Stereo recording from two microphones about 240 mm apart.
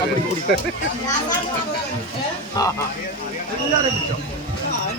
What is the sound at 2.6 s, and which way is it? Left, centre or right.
Speech, centre.